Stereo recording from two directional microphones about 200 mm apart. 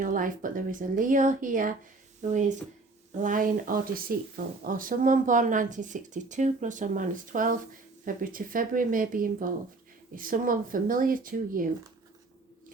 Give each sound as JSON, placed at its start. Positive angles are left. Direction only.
{"t": 0.0, "sound": "speech", "side_deg": -40}